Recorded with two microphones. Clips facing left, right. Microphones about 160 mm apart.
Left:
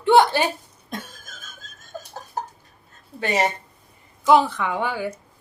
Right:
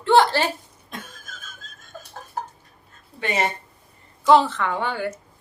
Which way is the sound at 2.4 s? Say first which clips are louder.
Left 1 dB; 35° left (ahead or behind).